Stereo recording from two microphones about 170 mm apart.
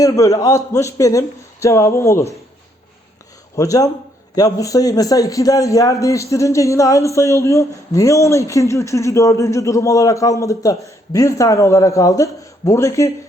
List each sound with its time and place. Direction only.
0.0 s a man's voice: 20° left (ahead or behind)
3.5 s a man's voice: 20° left (ahead or behind)